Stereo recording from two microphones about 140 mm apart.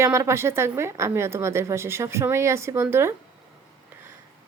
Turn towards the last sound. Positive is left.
turn(degrees=-15)  # may be behind; listen again after turning